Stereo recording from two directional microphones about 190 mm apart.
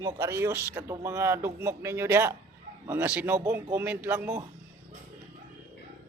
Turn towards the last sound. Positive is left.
turn(degrees=-10)  # may be behind; listen again after turning